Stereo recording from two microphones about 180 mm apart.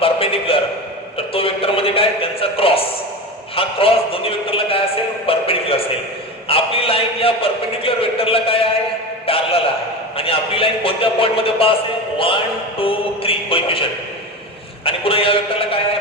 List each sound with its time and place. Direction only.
0.0 s a sound: 30° left (ahead or behind)
1.1 s a man's voice: 30° left (ahead or behind)
14.8 s speech: 30° left (ahead or behind)